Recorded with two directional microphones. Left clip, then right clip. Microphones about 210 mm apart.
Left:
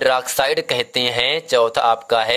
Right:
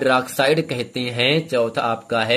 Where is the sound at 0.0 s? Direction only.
35° left (ahead or behind).